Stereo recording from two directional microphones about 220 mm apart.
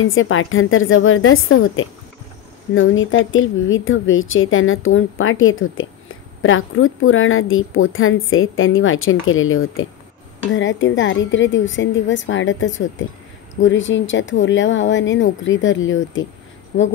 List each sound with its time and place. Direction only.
0.0 s a woman's voice: 65° left (ahead or behind)